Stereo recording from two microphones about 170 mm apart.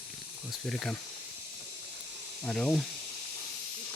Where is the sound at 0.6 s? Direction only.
5° left (ahead or behind).